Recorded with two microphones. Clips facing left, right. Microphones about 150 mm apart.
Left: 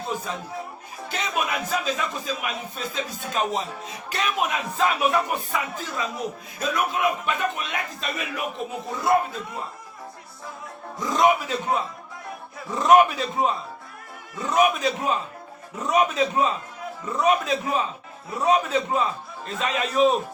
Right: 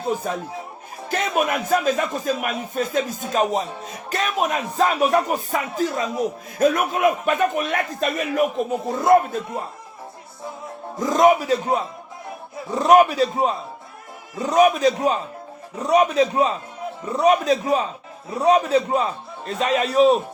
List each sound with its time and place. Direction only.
0.3 s a man's voice: 50° right (ahead or behind)
11.0 s a man's voice: 45° right (ahead or behind)